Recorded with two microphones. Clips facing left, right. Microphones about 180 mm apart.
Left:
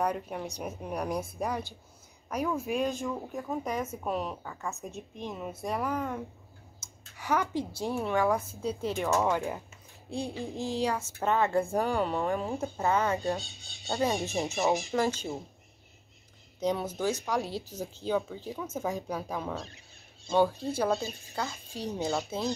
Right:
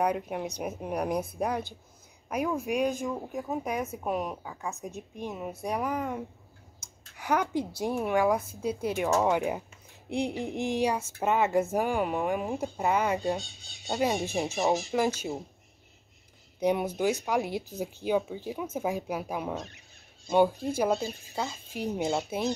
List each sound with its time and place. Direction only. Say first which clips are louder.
0.0 s speech: right 3 dB; 10° right (ahead or behind)
2.8 s speech: right 2 dB; 15° right (ahead or behind)
3.6 s speech: right 1 dB; centre (ahead or behind)
16.5 s speech: right 3 dB; 15° right (ahead or behind)